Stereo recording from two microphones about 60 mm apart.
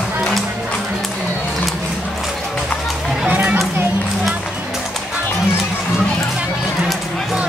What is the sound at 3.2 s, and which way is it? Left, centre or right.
Children playing, right.